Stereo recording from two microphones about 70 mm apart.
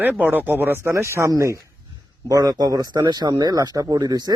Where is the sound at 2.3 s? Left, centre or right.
Right.